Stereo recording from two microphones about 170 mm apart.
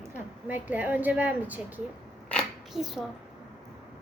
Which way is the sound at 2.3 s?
Centre (ahead or behind).